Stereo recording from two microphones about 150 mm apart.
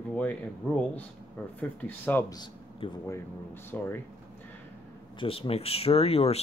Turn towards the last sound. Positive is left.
turn(degrees=40)  # may be behind; listen again after turning